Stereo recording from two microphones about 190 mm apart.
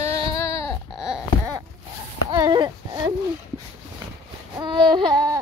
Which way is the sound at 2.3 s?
20° right (ahead or behind).